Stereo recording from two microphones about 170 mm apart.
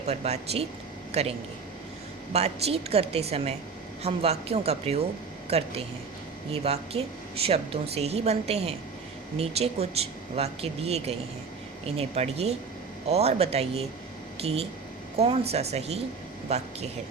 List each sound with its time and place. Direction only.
0.1 s speech: 40° right (ahead or behind)